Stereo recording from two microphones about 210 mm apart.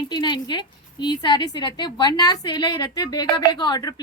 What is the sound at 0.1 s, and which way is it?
A woman's voice, 20° left (ahead or behind).